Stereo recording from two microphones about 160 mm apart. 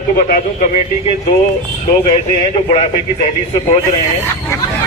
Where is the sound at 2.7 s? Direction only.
40° left (ahead or behind).